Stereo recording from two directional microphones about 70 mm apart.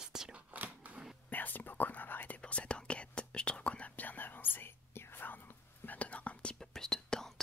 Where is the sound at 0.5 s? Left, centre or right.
Right.